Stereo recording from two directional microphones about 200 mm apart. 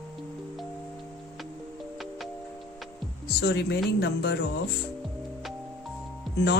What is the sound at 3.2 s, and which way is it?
Speech, 55° left (ahead or behind).